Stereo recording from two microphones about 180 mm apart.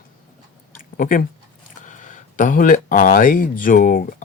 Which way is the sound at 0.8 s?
50° left (ahead or behind).